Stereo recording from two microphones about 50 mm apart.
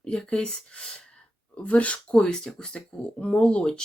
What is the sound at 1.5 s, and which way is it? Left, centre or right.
Speech, left.